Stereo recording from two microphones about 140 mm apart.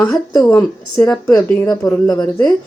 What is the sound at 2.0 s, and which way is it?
Speech, 30° left (ahead or behind).